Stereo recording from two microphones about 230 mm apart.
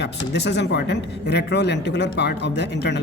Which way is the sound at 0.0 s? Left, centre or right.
Left.